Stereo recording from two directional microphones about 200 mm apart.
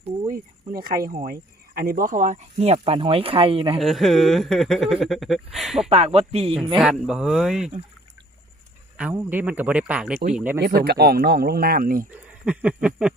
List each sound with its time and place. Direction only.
0.3 s speech: 45° right (ahead or behind); by 3.8 s 25° right (ahead or behind)
3.8 s speech: centre (ahead or behind)
5.9 s speech: 30° right (ahead or behind)
6.7 s speech: 5° right (ahead or behind)
9.0 s speech: 10° right (ahead or behind)
10.8 s speech: 50° right (ahead or behind)
12.1 s a sound: 5° right (ahead or behind)